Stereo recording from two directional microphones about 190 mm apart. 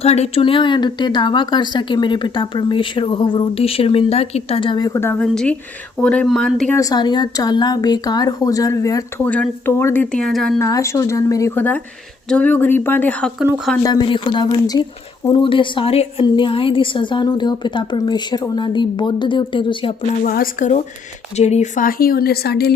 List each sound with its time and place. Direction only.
0.0 s speech: 35° left (ahead or behind); by 6.7 s 5° left (ahead or behind)
6.7 s speech: 20° left (ahead or behind); by 10.5 s 5° left (ahead or behind)
10.6 s speech: 15° left (ahead or behind)
13.8 s speech: 25° left (ahead or behind)
20.2 s speech: 50° left (ahead or behind)